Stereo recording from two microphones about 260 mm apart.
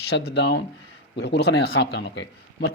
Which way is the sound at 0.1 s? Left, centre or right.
Left.